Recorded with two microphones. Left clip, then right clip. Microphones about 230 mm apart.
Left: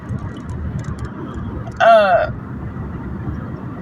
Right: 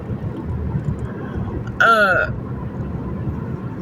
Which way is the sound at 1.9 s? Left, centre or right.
Left.